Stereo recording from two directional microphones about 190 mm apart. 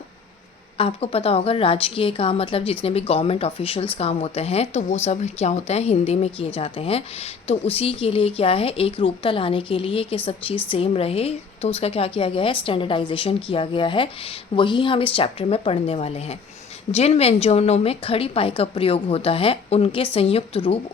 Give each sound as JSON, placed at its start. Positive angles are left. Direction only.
{"t": 0.8, "sound": "a woman's voice", "side_deg": 30}